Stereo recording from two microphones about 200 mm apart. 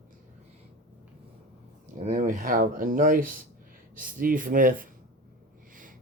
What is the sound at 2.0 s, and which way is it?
Speech, 40° right (ahead or behind).